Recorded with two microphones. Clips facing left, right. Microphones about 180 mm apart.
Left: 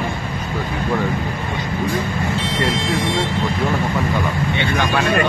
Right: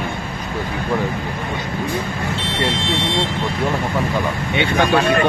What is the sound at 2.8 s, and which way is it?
Speech, 25° right (ahead or behind).